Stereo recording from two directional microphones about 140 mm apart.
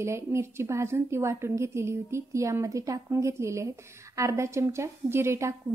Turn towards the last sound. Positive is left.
turn(degrees=-20)  # may be behind; listen again after turning